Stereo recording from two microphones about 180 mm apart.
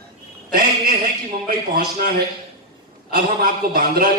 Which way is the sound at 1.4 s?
60° right (ahead or behind).